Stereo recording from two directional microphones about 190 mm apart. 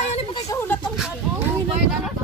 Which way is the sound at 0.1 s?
35° left (ahead or behind).